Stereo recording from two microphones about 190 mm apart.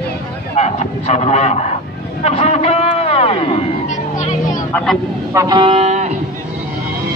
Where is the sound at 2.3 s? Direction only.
35° left (ahead or behind).